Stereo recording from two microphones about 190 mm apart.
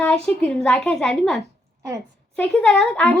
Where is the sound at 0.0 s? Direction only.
5° left (ahead or behind).